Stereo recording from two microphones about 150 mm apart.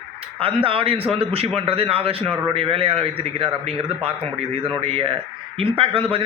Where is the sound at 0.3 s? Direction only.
35° right (ahead or behind).